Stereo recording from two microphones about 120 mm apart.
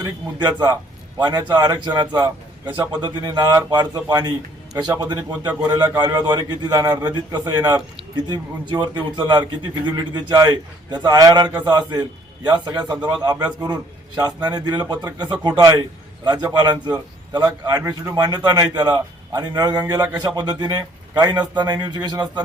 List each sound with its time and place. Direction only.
0.0 s a man's voice: 35° right (ahead or behind)